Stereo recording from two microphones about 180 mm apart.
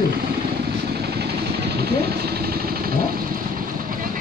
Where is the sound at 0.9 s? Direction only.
65° right (ahead or behind).